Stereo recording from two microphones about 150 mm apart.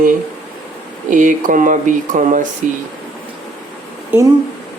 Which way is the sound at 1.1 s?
60° right (ahead or behind).